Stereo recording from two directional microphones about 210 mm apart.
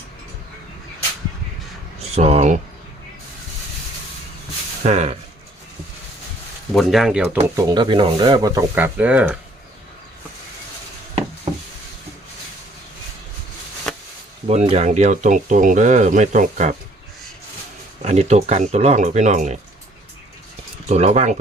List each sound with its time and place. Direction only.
2.0 s speech: 30° right (ahead or behind)
4.8 s speech: 30° right (ahead or behind)
6.7 s speech: centre (ahead or behind)
7.5 s speech: 20° right (ahead or behind)
13.9 s a sound: centre (ahead or behind)
14.4 s speech: 30° right (ahead or behind)
18.0 s speech: 30° right (ahead or behind)
20.8 s speech: 30° right (ahead or behind)